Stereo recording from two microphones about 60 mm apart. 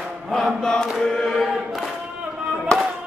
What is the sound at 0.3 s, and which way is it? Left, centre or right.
Chant, centre.